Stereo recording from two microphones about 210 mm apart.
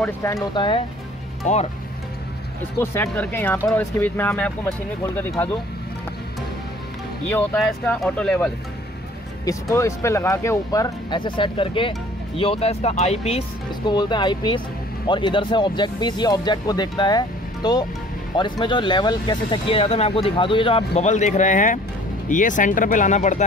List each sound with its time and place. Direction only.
0.0 s speech: 15° left (ahead or behind)
1.4 s speech: 35° left (ahead or behind)
2.8 s speech: 10° left (ahead or behind)
7.2 s speech: 5° left (ahead or behind)
9.4 s speech: 15° left (ahead or behind); by 23.4 s 35° left (ahead or behind)